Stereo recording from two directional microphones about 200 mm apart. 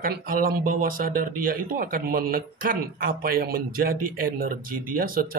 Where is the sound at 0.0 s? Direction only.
45° right (ahead or behind).